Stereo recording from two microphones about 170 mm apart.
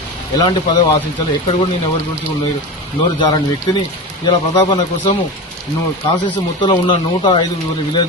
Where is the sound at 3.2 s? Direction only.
25° left (ahead or behind).